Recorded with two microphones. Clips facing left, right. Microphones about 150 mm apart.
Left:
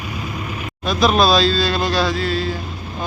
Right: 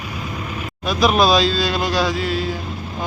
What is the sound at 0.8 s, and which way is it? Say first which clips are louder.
Speech: even; 10° right (ahead or behind).